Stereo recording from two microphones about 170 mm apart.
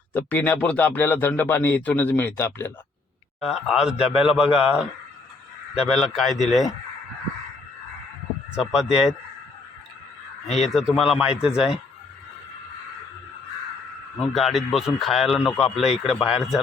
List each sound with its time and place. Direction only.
0.1 s speech: 10° left (ahead or behind)
3.4 s speech: 5° right (ahead or behind)
8.7 s speech: 5° right (ahead or behind)
10.4 s speech: 40° left (ahead or behind)
10.8 s speech: centre (ahead or behind)
14.2 s speech: centre (ahead or behind)